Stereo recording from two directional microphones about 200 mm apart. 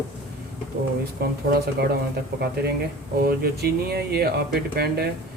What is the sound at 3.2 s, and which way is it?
Speech, 50° right (ahead or behind).